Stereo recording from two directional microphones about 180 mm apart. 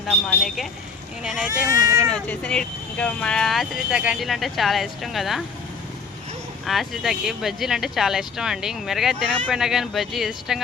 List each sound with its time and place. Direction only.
0.1 s speech: centre (ahead or behind)
1.7 s speech: 20° right (ahead or behind)
2.0 s speech: 5° left (ahead or behind)
6.7 s speech: centre (ahead or behind)